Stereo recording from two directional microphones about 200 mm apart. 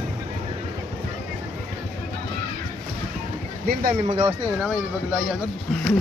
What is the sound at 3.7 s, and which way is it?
Speech, 45° right (ahead or behind).